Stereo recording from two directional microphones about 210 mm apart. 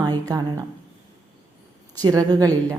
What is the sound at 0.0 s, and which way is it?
Speech, 20° right (ahead or behind).